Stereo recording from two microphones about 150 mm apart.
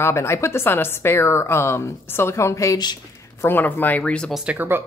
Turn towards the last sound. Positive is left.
turn(degrees=-15)  # may be behind; listen again after turning